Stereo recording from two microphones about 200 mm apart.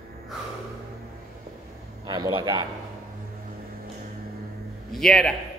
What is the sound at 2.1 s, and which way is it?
Speech, 20° right (ahead or behind).